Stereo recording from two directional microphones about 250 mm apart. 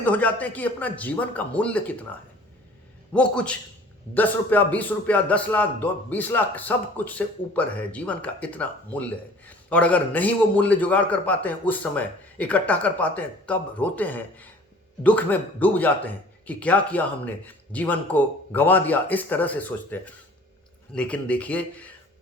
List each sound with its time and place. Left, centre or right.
0.0 s speech: centre
3.1 s a man's voice: centre